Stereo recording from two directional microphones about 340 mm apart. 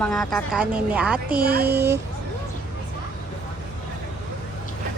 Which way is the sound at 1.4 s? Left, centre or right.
Right.